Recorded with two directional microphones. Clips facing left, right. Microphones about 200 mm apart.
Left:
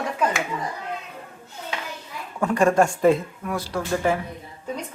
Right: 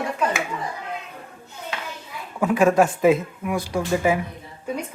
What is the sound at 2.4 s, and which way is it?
Speech, 5° right (ahead or behind).